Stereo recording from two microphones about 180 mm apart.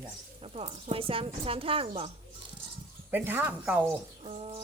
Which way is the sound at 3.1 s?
10° right (ahead or behind).